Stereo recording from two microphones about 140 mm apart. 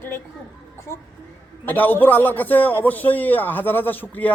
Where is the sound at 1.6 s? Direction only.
15° left (ahead or behind).